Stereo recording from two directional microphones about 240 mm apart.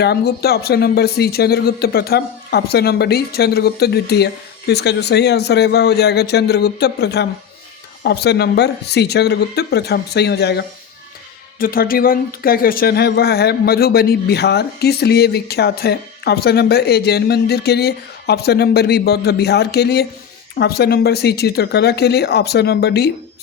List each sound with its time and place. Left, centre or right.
0.0 s speech: left